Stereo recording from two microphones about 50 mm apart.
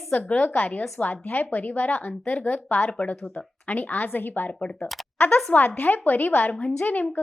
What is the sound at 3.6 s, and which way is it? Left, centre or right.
Speech, left.